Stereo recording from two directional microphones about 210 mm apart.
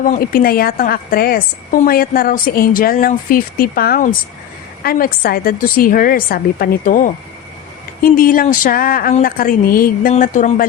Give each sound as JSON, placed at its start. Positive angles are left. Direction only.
{"t": 0.0, "sound": "a woman's voice", "side_deg": 40}